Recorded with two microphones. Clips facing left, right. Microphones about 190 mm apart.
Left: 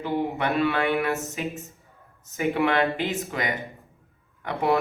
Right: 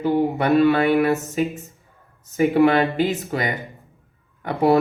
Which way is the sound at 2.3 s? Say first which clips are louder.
Right 7 dB; 35° right (ahead or behind).